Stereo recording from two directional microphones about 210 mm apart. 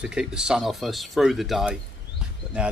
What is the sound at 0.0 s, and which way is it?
Speech, 5° right (ahead or behind).